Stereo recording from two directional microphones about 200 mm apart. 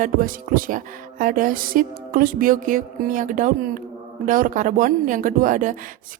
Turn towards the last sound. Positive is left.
turn(degrees=-40)  # may be behind; listen again after turning